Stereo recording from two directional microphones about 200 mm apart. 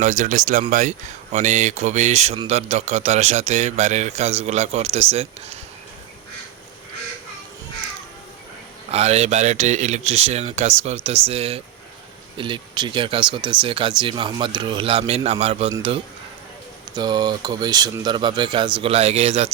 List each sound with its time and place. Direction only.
0.0 s a man's voice: 40° right (ahead or behind)
8.9 s a man's voice: 30° right (ahead or behind)
16.9 s speech: 20° right (ahead or behind)